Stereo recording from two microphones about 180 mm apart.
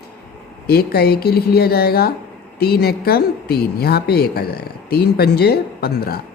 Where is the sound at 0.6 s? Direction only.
60° left (ahead or behind).